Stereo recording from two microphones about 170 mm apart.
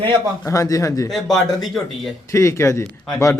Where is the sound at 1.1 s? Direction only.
Centre (ahead or behind).